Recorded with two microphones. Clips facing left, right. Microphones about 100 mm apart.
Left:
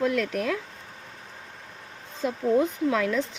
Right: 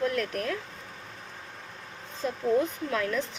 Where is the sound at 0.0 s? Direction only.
90° left.